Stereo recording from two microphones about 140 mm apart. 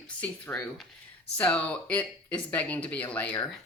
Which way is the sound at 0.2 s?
5° left (ahead or behind).